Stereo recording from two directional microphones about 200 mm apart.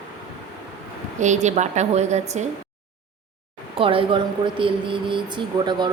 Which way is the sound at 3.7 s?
25° right (ahead or behind).